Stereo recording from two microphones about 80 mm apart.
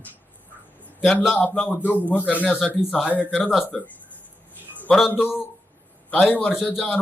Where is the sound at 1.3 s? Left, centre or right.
Centre.